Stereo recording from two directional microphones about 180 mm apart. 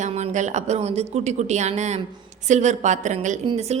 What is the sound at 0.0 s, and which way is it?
A woman's voice, 40° right (ahead or behind).